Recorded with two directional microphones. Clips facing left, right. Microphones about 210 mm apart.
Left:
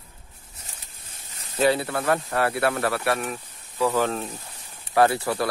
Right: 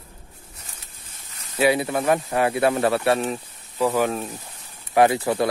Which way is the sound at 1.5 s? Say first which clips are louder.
Right 2 dB; 15° right (ahead or behind).